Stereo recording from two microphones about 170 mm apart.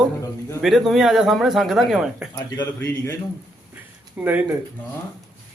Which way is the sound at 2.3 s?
25° left (ahead or behind).